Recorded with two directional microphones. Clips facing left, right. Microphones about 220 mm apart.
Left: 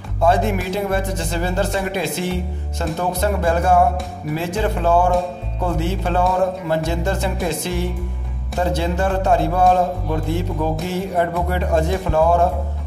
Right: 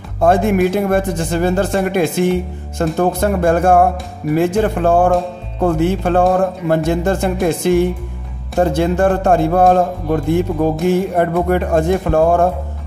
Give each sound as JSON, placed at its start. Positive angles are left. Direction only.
{"t": 0.2, "sound": "speech", "side_deg": -55}